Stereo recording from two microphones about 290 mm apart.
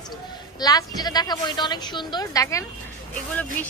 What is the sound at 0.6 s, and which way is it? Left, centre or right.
A woman's voice, centre.